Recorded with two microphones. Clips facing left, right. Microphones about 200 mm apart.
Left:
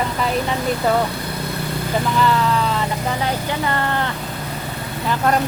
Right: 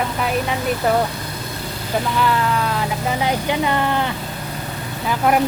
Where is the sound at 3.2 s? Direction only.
15° right (ahead or behind).